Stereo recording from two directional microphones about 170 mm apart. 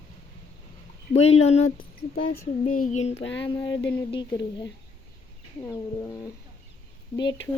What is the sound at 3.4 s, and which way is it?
Speech, 30° left (ahead or behind).